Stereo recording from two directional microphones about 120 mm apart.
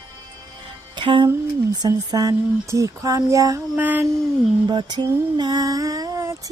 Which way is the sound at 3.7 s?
15° right (ahead or behind).